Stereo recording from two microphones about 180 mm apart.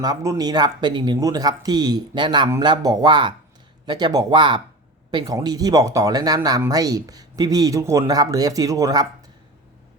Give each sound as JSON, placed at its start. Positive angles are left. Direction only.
{"t": 0.0, "sound": "speech", "side_deg": -20}